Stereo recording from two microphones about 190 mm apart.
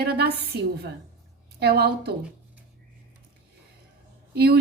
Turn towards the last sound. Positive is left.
turn(degrees=-55)  # may be behind; listen again after turning